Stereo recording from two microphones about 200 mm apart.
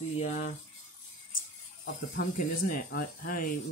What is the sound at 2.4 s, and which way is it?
Speech, 45° left (ahead or behind).